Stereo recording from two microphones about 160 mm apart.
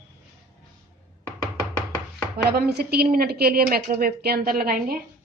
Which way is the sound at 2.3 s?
80° right.